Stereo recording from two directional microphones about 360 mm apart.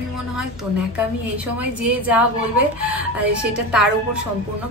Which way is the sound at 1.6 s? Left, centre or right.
Centre.